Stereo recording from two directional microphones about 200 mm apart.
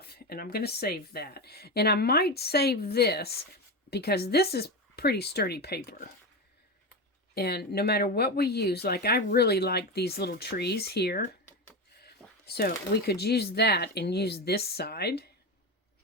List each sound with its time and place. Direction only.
0.0 s speech: 50° left (ahead or behind)
7.3 s speech: 55° left (ahead or behind)